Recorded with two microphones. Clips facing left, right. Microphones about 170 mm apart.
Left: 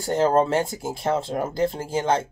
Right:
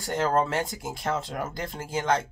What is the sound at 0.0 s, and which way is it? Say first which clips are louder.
Speech: left 5 dB; 30° left (ahead or behind).